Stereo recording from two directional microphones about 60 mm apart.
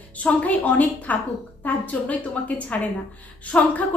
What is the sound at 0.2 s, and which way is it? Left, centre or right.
A woman's voice, left.